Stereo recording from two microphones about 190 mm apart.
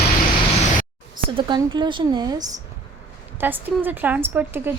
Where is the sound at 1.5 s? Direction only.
25° right (ahead or behind).